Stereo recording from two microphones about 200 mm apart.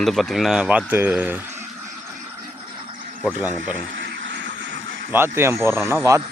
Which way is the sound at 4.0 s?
65° right (ahead or behind).